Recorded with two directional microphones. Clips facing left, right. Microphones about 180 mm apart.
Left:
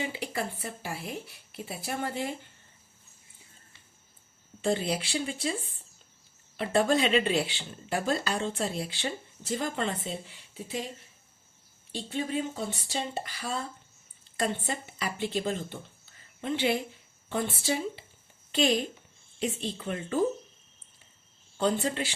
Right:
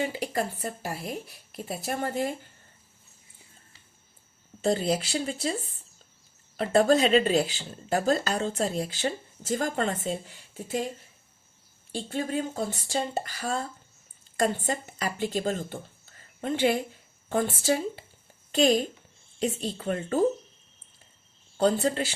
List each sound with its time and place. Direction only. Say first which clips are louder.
0.0 s speech: right 4 dB; 40° right (ahead or behind)
4.6 s speech: right 3 dB; 40° right (ahead or behind)
6.6 s speech: right 4 dB; 40° right (ahead or behind)
11.9 s speech: right 2 dB; 50° right (ahead or behind)
21.6 s speech: right 4 dB; 40° right (ahead or behind)